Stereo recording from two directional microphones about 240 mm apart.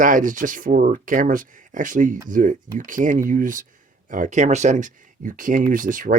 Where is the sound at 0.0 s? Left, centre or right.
Right.